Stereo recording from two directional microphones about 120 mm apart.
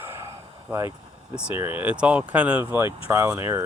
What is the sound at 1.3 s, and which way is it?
Speech, 15° right (ahead or behind).